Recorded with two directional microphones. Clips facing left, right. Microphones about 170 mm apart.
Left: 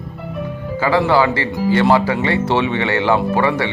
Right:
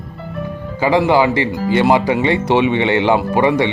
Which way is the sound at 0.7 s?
15° right (ahead or behind).